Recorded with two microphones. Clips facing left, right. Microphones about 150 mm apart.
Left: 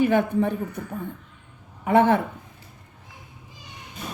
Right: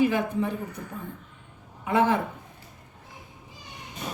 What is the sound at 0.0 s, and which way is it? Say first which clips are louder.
Speech: left 4 dB; 60° left (ahead or behind).